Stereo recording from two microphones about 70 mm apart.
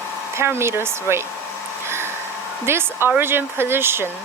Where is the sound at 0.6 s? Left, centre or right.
Right.